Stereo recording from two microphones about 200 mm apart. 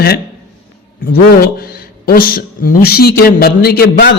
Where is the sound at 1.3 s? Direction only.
50° left (ahead or behind).